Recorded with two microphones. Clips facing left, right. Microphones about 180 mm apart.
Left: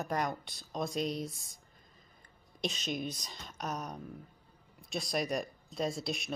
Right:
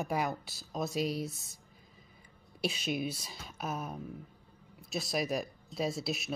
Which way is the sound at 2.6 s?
5° right (ahead or behind).